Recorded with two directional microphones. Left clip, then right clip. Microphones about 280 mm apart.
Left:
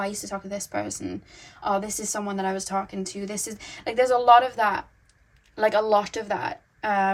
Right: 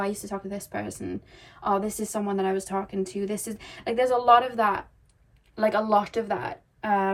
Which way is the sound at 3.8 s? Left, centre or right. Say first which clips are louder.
Left 2 dB; left.